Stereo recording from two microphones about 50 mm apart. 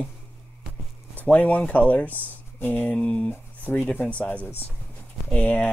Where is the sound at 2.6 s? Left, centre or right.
Left.